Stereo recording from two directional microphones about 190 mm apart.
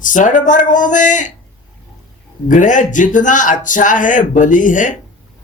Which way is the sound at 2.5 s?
40° left (ahead or behind).